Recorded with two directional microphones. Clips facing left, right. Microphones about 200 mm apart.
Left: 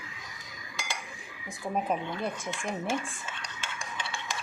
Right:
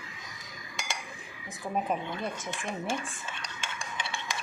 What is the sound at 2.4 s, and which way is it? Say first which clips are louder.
Speech: left 1 dB; centre (ahead or behind).